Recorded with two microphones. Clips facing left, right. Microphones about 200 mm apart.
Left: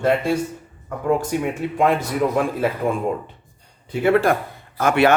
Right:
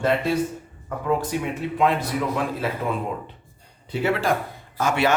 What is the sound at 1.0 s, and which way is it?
A man's voice, 45° left (ahead or behind).